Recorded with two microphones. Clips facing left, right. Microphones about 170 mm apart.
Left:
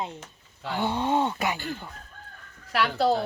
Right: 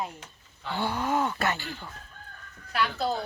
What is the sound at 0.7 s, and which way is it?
Groan, 20° left (ahead or behind).